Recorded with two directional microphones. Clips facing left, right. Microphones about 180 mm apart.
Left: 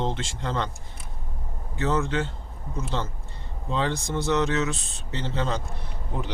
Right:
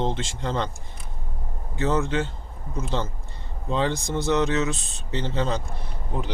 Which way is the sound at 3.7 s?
20° right (ahead or behind).